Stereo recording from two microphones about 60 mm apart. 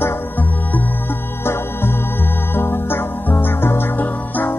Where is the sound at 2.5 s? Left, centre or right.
Left.